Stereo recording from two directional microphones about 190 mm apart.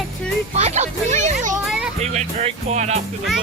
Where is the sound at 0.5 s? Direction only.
35° right (ahead or behind).